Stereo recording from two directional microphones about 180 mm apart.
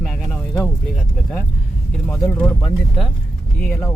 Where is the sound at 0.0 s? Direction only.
Centre (ahead or behind).